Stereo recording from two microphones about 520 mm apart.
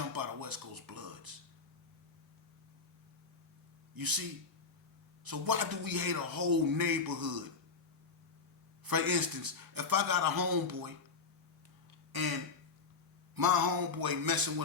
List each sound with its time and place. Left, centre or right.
0.1 s music: right
3.9 s a man's voice: right
8.8 s a man's voice: right
13.3 s a man's voice: right